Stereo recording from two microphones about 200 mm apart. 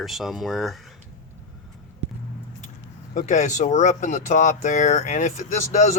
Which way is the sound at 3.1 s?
35° left (ahead or behind).